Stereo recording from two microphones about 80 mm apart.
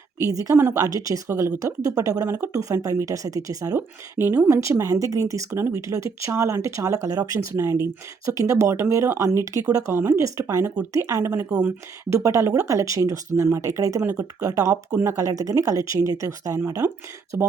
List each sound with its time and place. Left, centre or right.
0.2 s speech: right
0.5 s speech: right
0.8 s speech: right
2.2 s speech: right
2.5 s speech: right
3.8 s speech: right
9.9 s speech: right
17.3 s speech: right